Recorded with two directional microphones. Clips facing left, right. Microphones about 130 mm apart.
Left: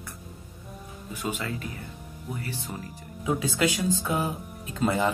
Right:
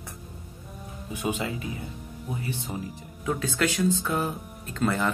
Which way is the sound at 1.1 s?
20° right (ahead or behind).